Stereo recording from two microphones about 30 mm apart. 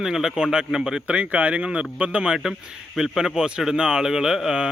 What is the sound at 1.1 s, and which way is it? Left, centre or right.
Speech, right.